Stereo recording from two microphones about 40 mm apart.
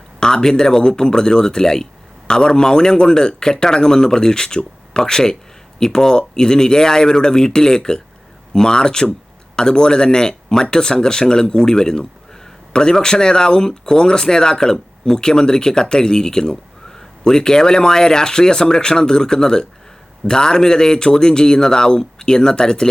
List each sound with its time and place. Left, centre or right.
0.2 s speech: centre